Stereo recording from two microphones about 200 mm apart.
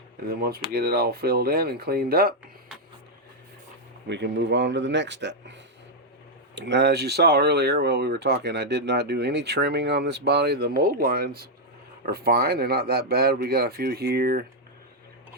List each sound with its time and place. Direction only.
0.3 s speech: 50° right (ahead or behind)
4.1 s speech: 60° right (ahead or behind)
6.6 s speech: 60° right (ahead or behind)